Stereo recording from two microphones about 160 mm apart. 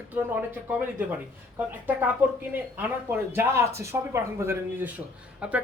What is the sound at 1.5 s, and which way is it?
Speech, 10° right (ahead or behind).